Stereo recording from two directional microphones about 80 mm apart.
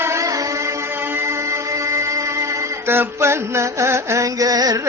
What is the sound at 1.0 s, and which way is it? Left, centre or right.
Music, right.